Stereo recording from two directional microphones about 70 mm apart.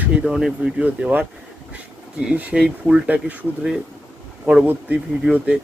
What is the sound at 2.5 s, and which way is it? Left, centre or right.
Speech, centre.